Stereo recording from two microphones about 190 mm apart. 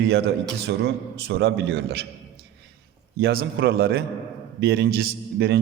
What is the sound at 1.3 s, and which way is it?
Speech, 70° right (ahead or behind).